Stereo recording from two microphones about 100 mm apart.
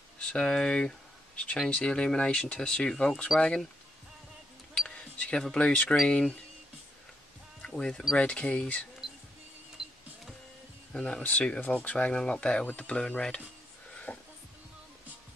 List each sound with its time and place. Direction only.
0.3 s speech: 10° left (ahead or behind)
4.7 s speech: 10° left (ahead or behind)
7.6 s speech: 10° left (ahead or behind)
9.8 s printer: 5° right (ahead or behind)
10.9 s speech: 10° left (ahead or behind)
14.1 s music: 20° left (ahead or behind)